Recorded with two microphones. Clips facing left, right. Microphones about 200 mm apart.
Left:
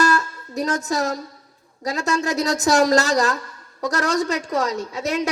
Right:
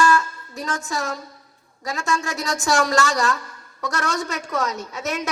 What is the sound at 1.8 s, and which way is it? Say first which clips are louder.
A woman's voice: left 3 dB; 35° left (ahead or behind).